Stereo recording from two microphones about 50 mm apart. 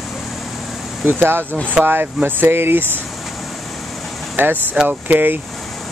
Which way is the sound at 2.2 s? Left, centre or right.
Right.